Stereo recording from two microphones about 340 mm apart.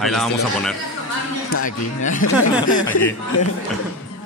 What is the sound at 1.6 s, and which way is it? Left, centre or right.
Speech, left.